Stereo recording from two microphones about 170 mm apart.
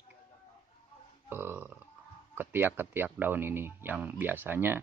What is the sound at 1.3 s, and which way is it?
Speech, 15° right (ahead or behind).